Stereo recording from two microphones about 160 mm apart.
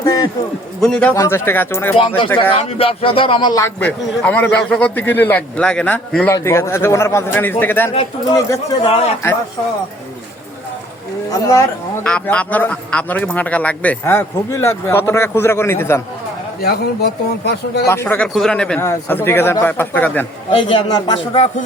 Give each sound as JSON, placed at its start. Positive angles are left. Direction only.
{"t": 0.0, "sound": "a sound", "side_deg": 20}
{"t": 0.8, "sound": "a man's voice", "side_deg": 5}
{"t": 1.1, "sound": "a man's voice", "side_deg": 15}
{"t": 2.0, "sound": "a man's voice", "side_deg": 35}
{"t": 4.0, "sound": "a man's voice", "side_deg": 5}
{"t": 6.2, "sound": "a man's voice", "side_deg": 15}
{"t": 8.8, "sound": "a man's voice", "side_deg": 35}
{"t": 11.3, "sound": "speech", "side_deg": 20}
{"t": 12.0, "sound": "a man's voice", "side_deg": 10}
{"t": 16.6, "sound": "a man's voice", "side_deg": 85}
{"t": 17.8, "sound": "a man's voice", "side_deg": 15}
{"t": 20.5, "sound": "a man's voice", "side_deg": 30}